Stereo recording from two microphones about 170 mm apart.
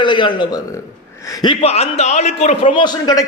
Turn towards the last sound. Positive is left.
turn(degrees=25)  # may be behind; listen again after turning